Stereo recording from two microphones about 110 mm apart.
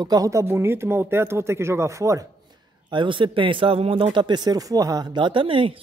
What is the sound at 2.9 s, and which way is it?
Speech, 50° right (ahead or behind).